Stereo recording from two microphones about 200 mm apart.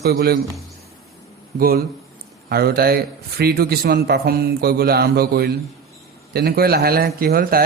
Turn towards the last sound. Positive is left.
turn(degrees=-50)  # may be behind; listen again after turning